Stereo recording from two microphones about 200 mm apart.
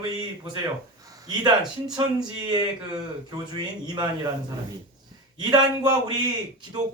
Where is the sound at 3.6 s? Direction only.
20° right (ahead or behind).